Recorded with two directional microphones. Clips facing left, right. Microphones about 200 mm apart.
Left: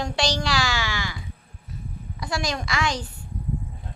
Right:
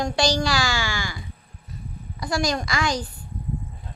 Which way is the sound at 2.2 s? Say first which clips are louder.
Right 4 dB; centre (ahead or behind).